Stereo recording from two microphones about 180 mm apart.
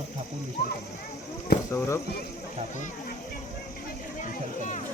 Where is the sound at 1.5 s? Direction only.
65° left (ahead or behind).